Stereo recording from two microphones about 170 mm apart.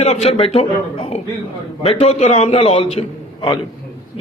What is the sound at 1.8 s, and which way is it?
A man's voice, 35° left (ahead or behind).